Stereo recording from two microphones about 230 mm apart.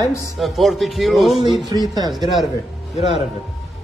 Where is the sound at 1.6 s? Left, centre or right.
Centre.